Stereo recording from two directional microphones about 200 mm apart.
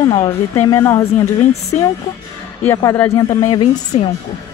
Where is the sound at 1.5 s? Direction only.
30° left (ahead or behind).